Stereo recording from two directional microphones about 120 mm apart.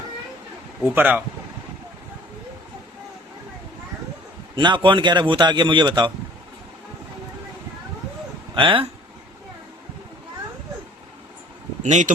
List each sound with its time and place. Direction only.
0.9 s speech: 15° right (ahead or behind)
4.5 s a man's voice: 40° right (ahead or behind)
8.5 s speech: 45° right (ahead or behind)
11.8 s speech: 80° right